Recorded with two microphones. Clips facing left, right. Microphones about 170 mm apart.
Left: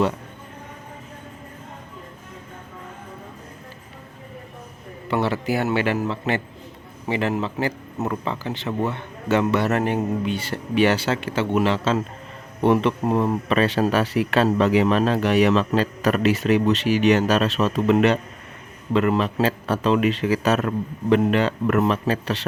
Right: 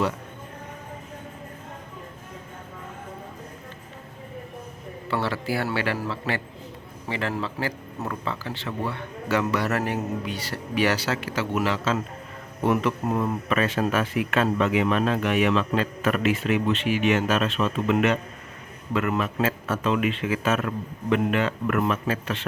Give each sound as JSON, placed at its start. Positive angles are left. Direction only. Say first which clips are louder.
{"t": 5.0, "sound": "a man's voice", "louder": "left 4 dB", "side_deg": 15}